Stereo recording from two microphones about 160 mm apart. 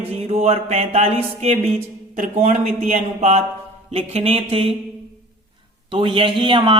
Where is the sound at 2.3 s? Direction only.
45° right (ahead or behind).